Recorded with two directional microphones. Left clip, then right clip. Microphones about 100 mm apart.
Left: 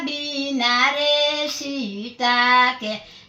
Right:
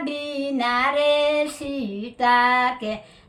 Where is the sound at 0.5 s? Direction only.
30° right (ahead or behind).